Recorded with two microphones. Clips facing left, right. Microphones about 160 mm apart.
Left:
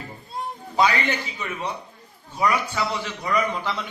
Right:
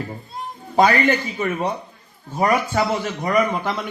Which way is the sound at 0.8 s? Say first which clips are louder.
Right 6 dB; 45° right (ahead or behind).